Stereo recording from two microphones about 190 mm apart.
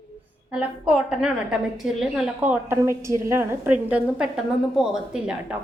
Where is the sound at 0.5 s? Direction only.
5° right (ahead or behind).